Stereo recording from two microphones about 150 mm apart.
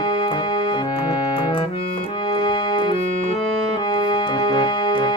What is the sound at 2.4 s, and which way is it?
Music, 30° left (ahead or behind).